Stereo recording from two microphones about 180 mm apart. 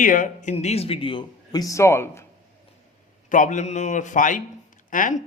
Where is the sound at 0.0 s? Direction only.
45° left (ahead or behind); by 2.2 s 15° left (ahead or behind).